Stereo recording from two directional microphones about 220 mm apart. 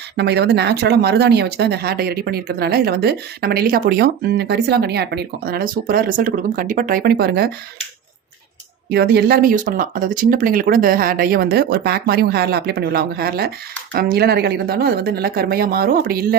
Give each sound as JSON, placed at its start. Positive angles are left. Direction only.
{"t": 0.2, "sound": "speech", "side_deg": -50}
{"t": 8.9, "sound": "speech", "side_deg": -45}